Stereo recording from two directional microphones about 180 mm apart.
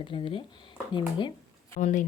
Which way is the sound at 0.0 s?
30° left (ahead or behind).